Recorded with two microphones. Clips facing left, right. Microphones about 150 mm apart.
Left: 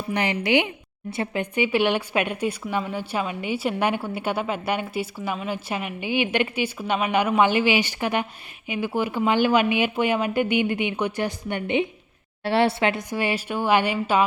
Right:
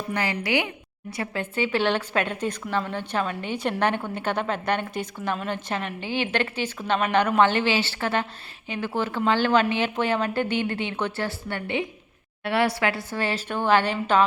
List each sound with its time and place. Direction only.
0.1 s a woman's voice: 20° left (ahead or behind)